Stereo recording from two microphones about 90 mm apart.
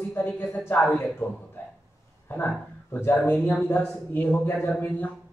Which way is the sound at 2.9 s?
25° left (ahead or behind).